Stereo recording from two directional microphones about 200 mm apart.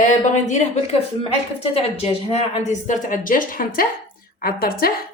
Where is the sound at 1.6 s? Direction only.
30° left (ahead or behind).